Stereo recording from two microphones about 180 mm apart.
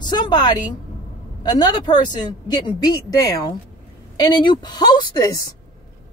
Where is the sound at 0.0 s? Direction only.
25° left (ahead or behind).